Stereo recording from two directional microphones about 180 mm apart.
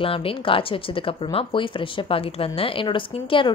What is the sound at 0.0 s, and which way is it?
Speech, 30° left (ahead or behind).